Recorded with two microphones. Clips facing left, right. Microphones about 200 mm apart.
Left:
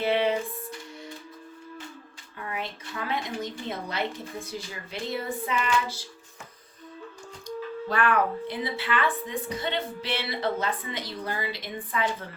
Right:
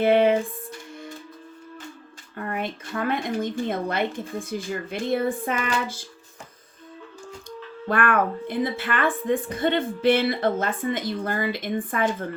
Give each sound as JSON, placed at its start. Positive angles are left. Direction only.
{"t": 0.0, "sound": "speech", "side_deg": -50}
{"t": 2.3, "sound": "speech", "side_deg": -50}
{"t": 7.4, "sound": "speech", "side_deg": -55}